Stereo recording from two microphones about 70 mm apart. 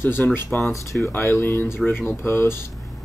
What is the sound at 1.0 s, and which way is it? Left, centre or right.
Speech, left.